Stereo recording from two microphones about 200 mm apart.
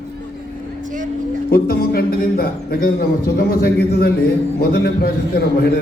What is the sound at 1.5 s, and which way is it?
A man's voice, 45° left (ahead or behind).